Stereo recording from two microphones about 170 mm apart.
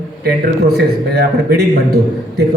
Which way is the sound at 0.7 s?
70° right (ahead or behind).